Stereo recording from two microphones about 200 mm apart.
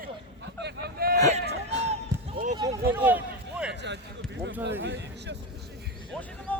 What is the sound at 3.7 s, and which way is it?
Basketball bounce, 60° right (ahead or behind).